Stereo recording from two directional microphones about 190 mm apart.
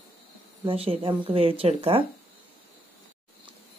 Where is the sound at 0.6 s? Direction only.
30° right (ahead or behind).